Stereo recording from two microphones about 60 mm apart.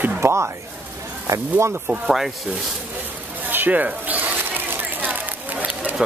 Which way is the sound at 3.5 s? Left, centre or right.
Right.